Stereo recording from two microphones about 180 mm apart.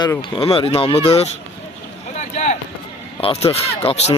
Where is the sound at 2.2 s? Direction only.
40° left (ahead or behind).